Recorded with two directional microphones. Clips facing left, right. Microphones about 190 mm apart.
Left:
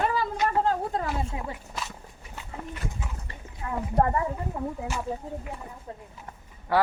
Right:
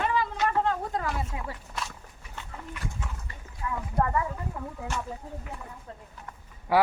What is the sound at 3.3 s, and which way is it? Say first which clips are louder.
Speech: even; 35° left (ahead or behind).